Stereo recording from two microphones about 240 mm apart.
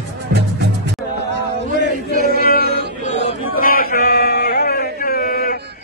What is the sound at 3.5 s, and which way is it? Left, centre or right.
Chant, left.